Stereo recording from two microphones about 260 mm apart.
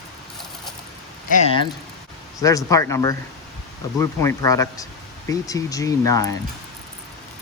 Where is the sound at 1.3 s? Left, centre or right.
Left.